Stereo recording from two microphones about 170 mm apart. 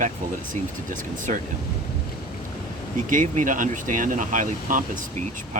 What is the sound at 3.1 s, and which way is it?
Speech, 50° right (ahead or behind).